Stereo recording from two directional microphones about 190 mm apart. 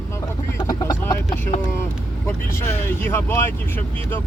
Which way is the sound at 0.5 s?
15° left (ahead or behind).